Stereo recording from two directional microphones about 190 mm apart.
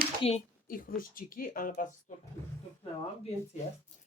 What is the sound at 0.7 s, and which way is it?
Speech, 45° left (ahead or behind).